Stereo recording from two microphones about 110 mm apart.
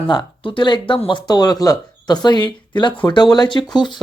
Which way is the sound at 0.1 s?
45° left (ahead or behind).